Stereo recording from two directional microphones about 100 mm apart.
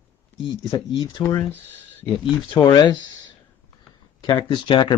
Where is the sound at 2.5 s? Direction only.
50° left (ahead or behind).